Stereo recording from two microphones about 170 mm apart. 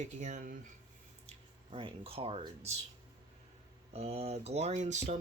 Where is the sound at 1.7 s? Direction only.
30° right (ahead or behind).